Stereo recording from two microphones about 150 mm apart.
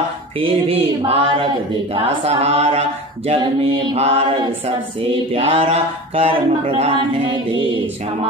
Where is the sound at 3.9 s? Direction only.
40° right (ahead or behind).